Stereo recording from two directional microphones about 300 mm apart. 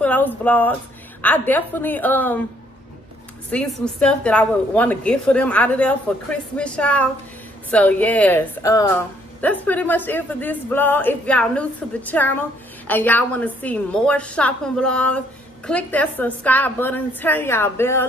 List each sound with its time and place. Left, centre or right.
0.0 s a woman's voice: centre
3.4 s a woman's voice: centre